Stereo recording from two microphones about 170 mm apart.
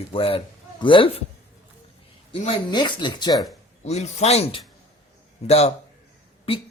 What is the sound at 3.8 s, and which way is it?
Speech, 40° left (ahead or behind).